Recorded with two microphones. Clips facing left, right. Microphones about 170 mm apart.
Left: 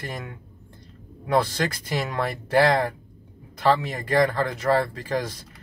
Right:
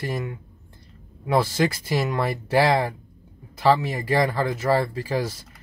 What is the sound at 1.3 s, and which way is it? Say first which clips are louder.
Speech: right 2 dB; 5° right (ahead or behind).